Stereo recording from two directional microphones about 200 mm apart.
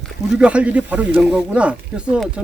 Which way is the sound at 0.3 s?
5° right (ahead or behind).